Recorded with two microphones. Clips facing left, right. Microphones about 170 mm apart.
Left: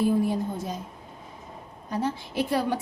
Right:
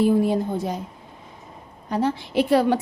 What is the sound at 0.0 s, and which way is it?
Speech, 75° right (ahead or behind).